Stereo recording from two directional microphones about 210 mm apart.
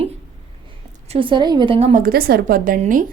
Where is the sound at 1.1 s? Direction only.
25° right (ahead or behind); by 3.0 s 40° right (ahead or behind).